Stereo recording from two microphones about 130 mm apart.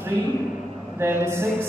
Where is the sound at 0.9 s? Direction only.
20° right (ahead or behind).